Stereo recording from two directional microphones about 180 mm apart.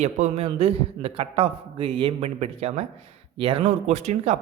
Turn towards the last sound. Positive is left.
turn(degrees=-40)  # may be behind; listen again after turning